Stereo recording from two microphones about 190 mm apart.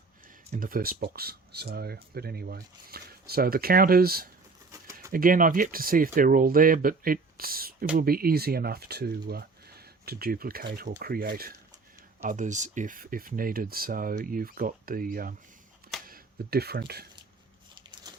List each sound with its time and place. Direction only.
0.5 s speech: 50° right (ahead or behind)
4.7 s bird: 15° right (ahead or behind)
5.1 s speech: 45° right (ahead or behind)
17.7 s a sound: 25° right (ahead or behind)